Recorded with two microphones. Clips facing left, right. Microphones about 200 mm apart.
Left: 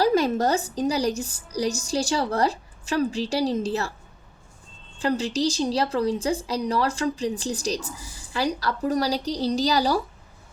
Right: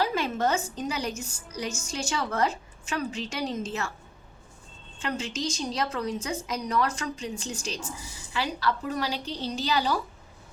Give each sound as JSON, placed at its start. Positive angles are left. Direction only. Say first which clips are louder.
{"t": 0.0, "sound": "a woman's voice", "louder": "left 6 dB", "side_deg": 40}
{"t": 4.9, "sound": "a woman's voice", "louder": "left 8 dB", "side_deg": 35}